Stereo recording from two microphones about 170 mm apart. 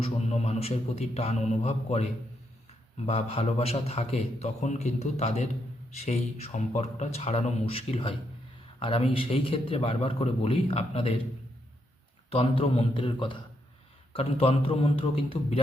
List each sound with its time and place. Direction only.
0.0 s a man's voice: 40° left (ahead or behind)
3.1 s a man's voice: 40° left (ahead or behind)
12.3 s a man's voice: 30° left (ahead or behind)